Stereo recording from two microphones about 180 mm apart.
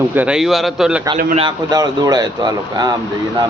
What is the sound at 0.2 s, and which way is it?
Speech, 5° right (ahead or behind).